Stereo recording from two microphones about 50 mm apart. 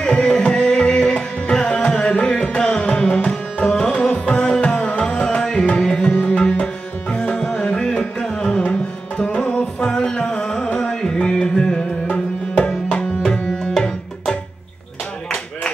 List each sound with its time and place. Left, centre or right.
0.0 s music: centre
6.5 s tabla: left
7.8 s music: centre
12.9 s tabla: centre